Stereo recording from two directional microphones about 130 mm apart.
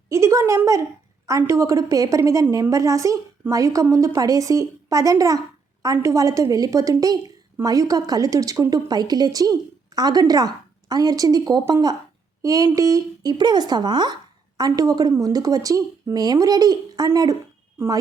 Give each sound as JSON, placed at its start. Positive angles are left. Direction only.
{"t": 0.1, "sound": "a woman's voice", "side_deg": -25}